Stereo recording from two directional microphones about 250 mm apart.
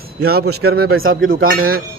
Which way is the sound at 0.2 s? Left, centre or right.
Right.